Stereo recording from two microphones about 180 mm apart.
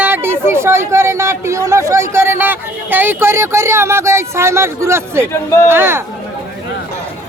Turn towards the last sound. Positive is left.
turn(degrees=-15)  # may be behind; listen again after turning